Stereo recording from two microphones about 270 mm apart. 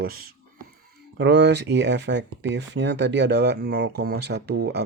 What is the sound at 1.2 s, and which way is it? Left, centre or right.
Speech, right.